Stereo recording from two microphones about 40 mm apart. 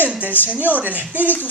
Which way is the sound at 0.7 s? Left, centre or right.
Right.